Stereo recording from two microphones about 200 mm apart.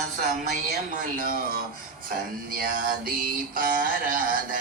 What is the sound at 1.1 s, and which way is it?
Speech, 45° right (ahead or behind).